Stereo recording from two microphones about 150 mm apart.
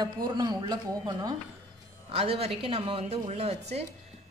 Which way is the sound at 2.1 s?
40° right (ahead or behind).